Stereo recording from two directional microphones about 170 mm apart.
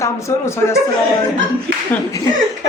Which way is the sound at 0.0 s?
15° left (ahead or behind).